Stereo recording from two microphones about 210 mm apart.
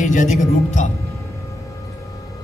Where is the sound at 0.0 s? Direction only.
35° left (ahead or behind).